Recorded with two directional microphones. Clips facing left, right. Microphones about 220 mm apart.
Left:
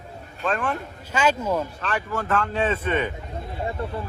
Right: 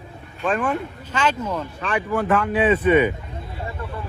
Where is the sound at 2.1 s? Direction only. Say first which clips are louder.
Right 6 dB; 15° right (ahead or behind).